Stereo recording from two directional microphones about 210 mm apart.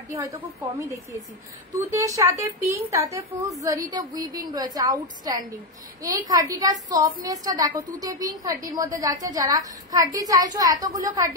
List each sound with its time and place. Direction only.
0.1 s a woman's voice: 15° right (ahead or behind)